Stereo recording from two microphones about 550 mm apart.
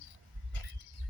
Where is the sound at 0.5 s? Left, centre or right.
Right.